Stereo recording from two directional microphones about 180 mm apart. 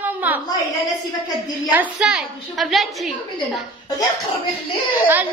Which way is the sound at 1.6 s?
5° right (ahead or behind).